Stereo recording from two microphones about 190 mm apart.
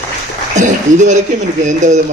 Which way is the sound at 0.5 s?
40° right (ahead or behind).